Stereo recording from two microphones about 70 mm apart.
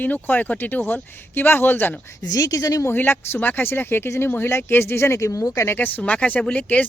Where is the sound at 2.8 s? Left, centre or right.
Left.